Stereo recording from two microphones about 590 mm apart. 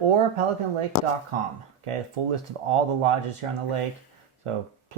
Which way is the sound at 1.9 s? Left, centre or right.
Right.